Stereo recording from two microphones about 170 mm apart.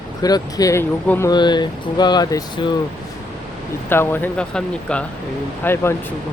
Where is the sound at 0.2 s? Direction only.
20° left (ahead or behind).